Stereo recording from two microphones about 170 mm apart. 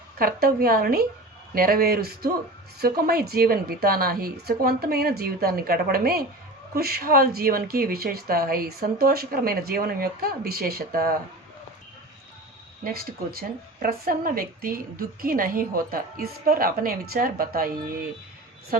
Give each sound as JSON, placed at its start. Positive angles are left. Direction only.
{"t": 0.2, "sound": "a woman's voice", "side_deg": -60}
{"t": 12.8, "sound": "a woman's voice", "side_deg": -60}